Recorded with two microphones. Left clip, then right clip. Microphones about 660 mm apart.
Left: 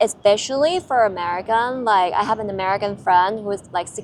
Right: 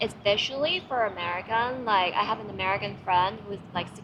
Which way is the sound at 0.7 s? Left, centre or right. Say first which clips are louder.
Left 9 dB; left.